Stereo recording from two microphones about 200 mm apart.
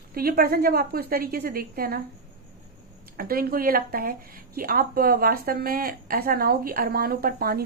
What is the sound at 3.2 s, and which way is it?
Speech, 45° right (ahead or behind).